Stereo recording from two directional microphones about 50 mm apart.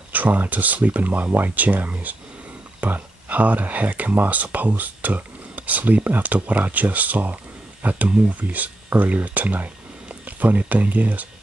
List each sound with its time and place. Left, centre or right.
0.1 s speech: right